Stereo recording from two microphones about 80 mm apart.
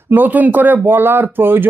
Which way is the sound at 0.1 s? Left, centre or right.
Right.